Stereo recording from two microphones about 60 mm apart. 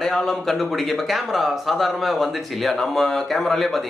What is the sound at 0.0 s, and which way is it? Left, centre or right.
Speech, centre.